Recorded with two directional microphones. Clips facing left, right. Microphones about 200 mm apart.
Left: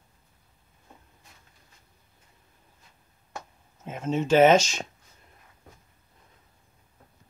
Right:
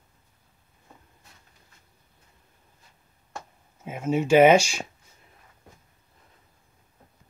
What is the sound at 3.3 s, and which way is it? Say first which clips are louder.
Speech: even; 10° right (ahead or behind).